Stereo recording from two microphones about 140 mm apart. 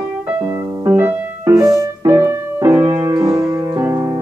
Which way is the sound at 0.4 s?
15° right (ahead or behind).